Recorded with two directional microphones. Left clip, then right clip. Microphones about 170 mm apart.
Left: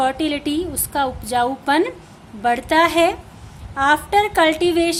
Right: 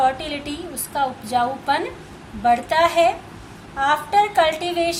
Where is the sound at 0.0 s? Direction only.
55° left (ahead or behind).